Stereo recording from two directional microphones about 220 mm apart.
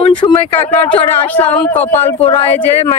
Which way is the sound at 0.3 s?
25° left (ahead or behind).